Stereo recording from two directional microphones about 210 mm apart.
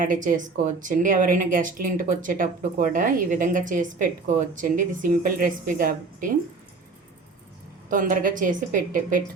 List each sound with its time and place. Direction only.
0.0 s speech: 40° right (ahead or behind)
7.9 s speech: 40° right (ahead or behind)